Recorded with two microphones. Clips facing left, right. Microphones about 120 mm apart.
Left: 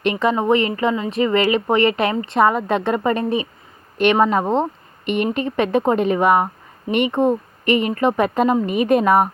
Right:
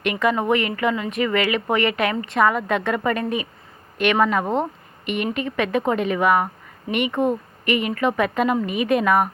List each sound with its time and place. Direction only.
0.0 s speech: 25° left (ahead or behind)